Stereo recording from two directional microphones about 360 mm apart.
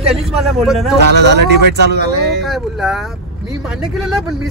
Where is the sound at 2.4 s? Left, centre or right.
Centre.